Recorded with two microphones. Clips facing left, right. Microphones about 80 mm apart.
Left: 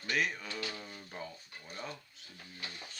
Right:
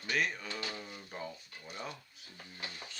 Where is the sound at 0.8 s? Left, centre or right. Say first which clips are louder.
Right 1 dB; centre.